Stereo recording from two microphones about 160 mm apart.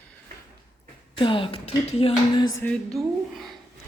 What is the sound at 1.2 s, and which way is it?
Speech, 30° left (ahead or behind).